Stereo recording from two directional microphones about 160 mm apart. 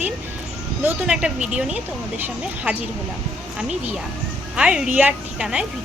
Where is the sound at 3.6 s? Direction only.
5° right (ahead or behind).